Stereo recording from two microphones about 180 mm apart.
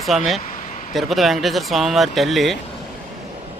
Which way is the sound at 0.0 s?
Centre (ahead or behind).